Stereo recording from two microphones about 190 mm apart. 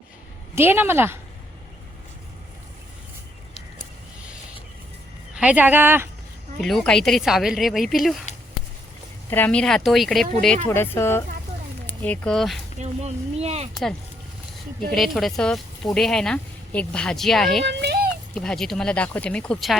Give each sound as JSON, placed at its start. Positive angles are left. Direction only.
{"t": 0.5, "sound": "speech", "side_deg": -10}
{"t": 5.3, "sound": "speech", "side_deg": -5}
{"t": 6.6, "sound": "speech", "side_deg": 0}
{"t": 9.3, "sound": "speech", "side_deg": 5}
{"t": 10.7, "sound": "speech", "side_deg": 15}
{"t": 12.8, "sound": "speech", "side_deg": -35}
{"t": 14.9, "sound": "speech", "side_deg": 0}
{"t": 17.7, "sound": "a sound", "side_deg": -60}
{"t": 18.3, "sound": "speech", "side_deg": 5}